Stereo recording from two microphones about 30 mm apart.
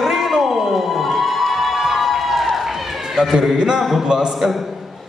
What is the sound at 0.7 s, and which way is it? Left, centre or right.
Crowd, centre.